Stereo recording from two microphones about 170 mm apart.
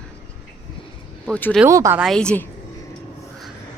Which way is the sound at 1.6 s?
15° right (ahead or behind).